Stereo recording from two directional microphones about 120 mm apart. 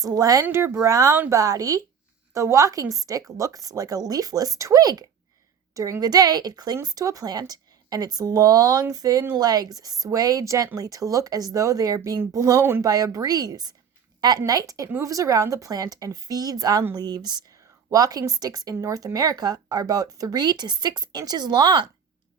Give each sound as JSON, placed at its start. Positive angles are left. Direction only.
{"t": 0.0, "sound": "speech", "side_deg": -30}
{"t": 0.4, "sound": "speech", "side_deg": -20}